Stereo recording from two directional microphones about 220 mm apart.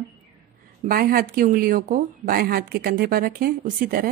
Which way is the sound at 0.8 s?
40° right (ahead or behind).